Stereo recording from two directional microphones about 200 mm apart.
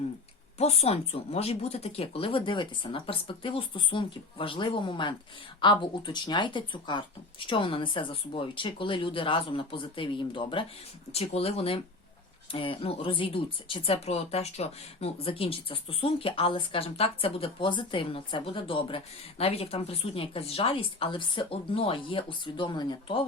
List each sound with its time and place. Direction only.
0.6 s speech: 30° left (ahead or behind)